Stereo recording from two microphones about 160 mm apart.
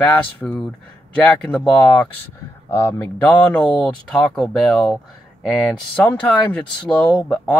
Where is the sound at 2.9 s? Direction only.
10° left (ahead or behind).